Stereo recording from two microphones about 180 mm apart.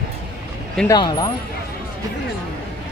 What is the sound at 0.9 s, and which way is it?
Speech, 20° left (ahead or behind).